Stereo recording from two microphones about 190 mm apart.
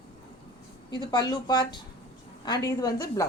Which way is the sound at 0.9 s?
20° left (ahead or behind).